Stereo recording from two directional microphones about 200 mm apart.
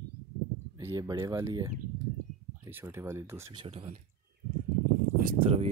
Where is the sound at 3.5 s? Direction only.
25° right (ahead or behind).